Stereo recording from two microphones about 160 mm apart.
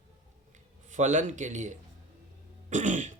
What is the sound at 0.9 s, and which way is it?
Speech, 50° right (ahead or behind).